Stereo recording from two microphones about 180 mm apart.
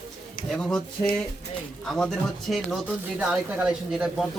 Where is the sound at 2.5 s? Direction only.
5° right (ahead or behind).